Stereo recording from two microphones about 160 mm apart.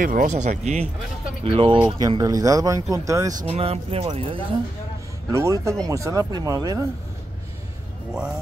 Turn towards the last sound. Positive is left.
turn(degrees=-20)  # may be behind; listen again after turning